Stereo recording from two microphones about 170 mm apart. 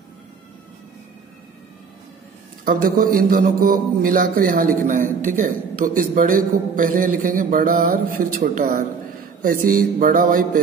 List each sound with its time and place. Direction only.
2.6 s a man's voice: 55° right (ahead or behind)